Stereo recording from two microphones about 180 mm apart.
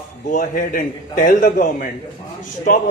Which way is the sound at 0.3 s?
50° left (ahead or behind).